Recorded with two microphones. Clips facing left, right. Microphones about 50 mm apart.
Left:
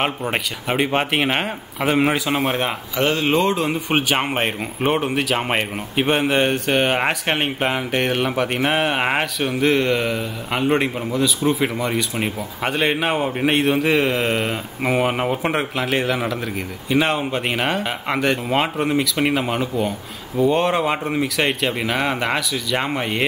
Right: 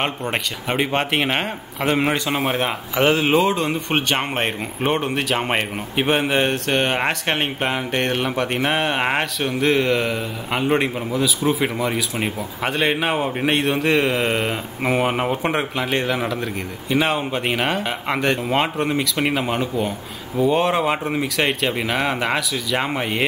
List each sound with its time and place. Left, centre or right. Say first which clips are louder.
0.0 s speech: left 1 dB; centre
3.0 s speech: right 3 dB; centre
3.3 s speech: right 1 dB; centre